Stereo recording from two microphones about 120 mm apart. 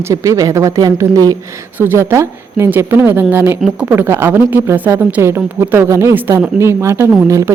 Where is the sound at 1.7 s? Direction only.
20° right (ahead or behind).